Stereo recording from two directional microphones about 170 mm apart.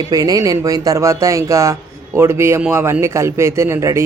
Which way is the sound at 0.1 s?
20° right (ahead or behind).